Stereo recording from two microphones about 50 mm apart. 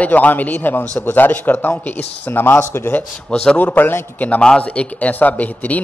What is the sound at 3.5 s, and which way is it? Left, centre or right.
Speech, left.